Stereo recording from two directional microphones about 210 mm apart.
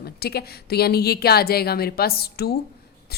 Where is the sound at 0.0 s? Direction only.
50° left (ahead or behind).